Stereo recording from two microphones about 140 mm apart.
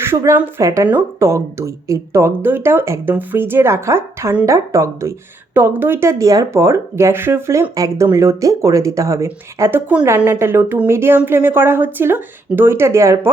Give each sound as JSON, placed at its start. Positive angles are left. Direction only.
{"t": 0.0, "sound": "speech", "side_deg": -20}